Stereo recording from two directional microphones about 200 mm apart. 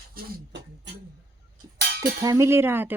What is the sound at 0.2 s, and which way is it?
Speech, 45° right (ahead or behind).